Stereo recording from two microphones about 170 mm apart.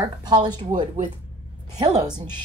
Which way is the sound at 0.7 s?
50° right (ahead or behind).